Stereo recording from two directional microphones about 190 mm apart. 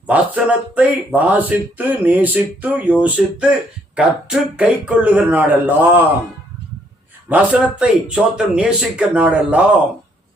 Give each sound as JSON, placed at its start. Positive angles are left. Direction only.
{"t": 0.1, "sound": "speech", "side_deg": -5}
{"t": 7.3, "sound": "a man's voice", "side_deg": -5}